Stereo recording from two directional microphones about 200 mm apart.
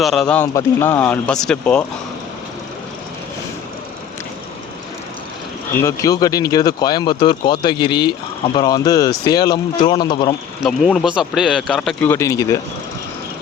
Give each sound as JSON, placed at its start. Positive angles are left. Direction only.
{"t": 0.0, "sound": "speech", "side_deg": 0}
{"t": 5.7, "sound": "speech", "side_deg": 15}
{"t": 10.6, "sound": "speech", "side_deg": 0}